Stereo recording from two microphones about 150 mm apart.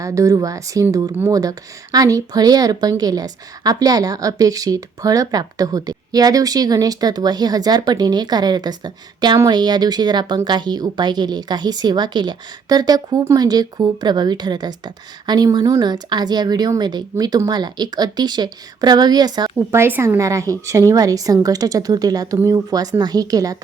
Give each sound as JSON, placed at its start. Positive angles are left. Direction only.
{"t": 0.0, "sound": "a woman's voice", "side_deg": -20}
{"t": 19.8, "sound": "a woman's voice", "side_deg": -15}